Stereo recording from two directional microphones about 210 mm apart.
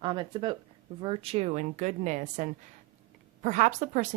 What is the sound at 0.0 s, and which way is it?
Speech, 20° right (ahead or behind).